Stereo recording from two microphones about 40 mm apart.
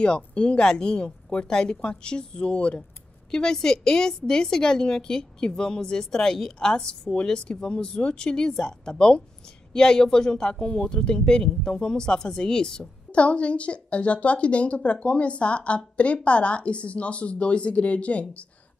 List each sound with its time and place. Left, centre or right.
0.0 s a woman's voice: left
13.1 s a woman's voice: left